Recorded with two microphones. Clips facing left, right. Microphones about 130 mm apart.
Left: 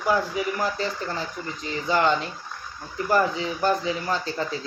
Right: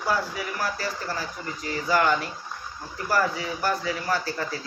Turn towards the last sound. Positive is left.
turn(degrees=20)  # may be behind; listen again after turning